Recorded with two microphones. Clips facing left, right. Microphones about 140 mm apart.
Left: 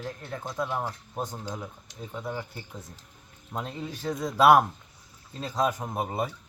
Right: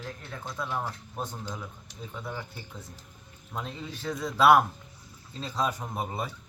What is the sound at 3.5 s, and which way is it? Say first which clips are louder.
Speech: left 3 dB; 10° left (ahead or behind).